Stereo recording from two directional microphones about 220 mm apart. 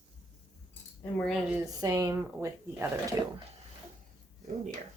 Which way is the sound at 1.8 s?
15° right (ahead or behind).